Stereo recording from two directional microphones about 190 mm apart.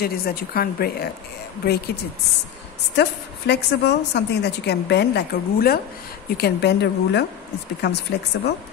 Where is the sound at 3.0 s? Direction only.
60° left (ahead or behind).